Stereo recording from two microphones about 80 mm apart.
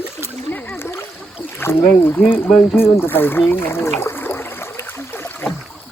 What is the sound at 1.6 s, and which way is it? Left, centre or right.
Speech, left.